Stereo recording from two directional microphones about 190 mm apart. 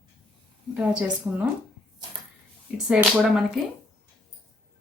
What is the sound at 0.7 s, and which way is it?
Speech, 5° right (ahead or behind).